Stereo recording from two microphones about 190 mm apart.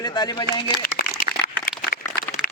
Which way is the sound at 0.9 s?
50° left (ahead or behind).